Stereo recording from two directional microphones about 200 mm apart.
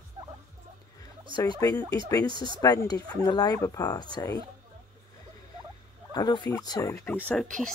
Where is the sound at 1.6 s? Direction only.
15° left (ahead or behind).